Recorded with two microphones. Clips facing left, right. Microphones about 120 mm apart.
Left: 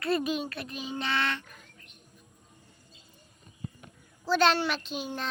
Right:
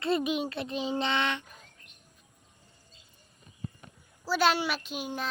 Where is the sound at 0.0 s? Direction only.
20° right (ahead or behind).